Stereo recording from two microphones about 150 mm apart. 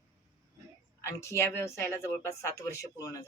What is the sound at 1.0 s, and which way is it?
Speech, 20° left (ahead or behind).